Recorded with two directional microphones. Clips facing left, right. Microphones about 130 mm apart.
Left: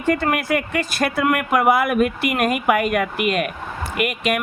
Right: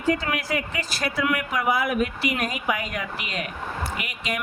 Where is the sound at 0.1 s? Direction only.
55° left (ahead or behind).